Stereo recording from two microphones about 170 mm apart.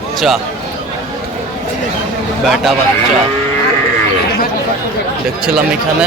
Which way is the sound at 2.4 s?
Centre (ahead or behind).